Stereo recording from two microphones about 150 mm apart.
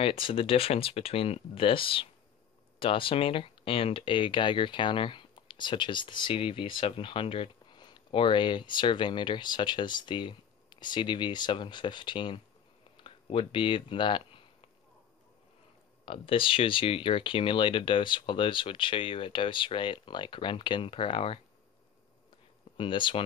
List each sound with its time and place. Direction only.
0.0 s speech: 35° left (ahead or behind)
12.9 s a sound: 35° left (ahead or behind)
16.1 s speech: 35° left (ahead or behind)
22.8 s speech: 35° left (ahead or behind)